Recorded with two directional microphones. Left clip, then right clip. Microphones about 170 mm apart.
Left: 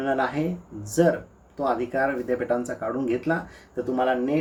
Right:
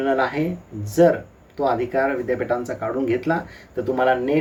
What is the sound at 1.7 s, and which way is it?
Speech, 15° left (ahead or behind).